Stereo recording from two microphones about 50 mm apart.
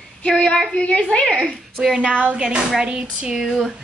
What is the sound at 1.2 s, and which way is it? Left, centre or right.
Speech, centre.